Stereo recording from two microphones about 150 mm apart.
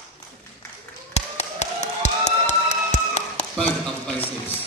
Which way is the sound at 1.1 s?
45° left (ahead or behind).